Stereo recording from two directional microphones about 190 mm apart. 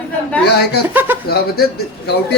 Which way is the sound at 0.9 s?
10° right (ahead or behind).